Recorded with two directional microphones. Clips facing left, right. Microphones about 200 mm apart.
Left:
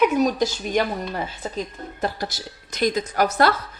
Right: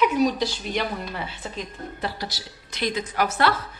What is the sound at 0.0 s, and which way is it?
Speech, 45° left (ahead or behind).